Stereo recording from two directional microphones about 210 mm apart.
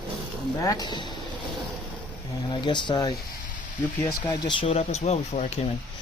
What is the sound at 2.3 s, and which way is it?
Speech, 20° left (ahead or behind).